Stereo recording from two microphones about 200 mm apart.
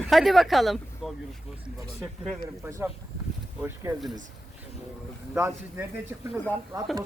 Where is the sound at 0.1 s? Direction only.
Centre (ahead or behind).